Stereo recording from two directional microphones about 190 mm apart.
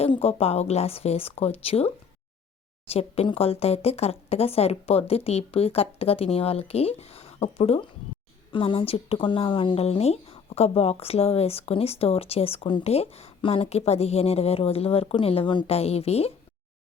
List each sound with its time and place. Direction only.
0.0 s speech: 30° left (ahead or behind)